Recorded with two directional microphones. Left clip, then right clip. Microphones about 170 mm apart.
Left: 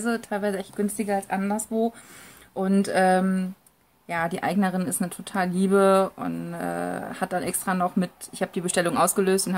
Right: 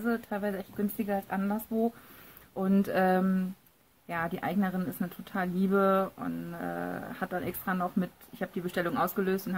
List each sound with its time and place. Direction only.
0.0 s speech: 10° left (ahead or behind)
2.5 s a sound: centre (ahead or behind)
4.1 s speech: 5° left (ahead or behind)